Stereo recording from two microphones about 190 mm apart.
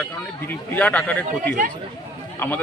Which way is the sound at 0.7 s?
5° left (ahead or behind).